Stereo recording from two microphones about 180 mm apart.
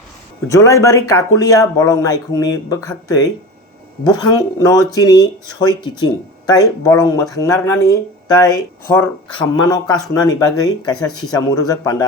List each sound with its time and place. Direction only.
0.4 s speech: 15° left (ahead or behind)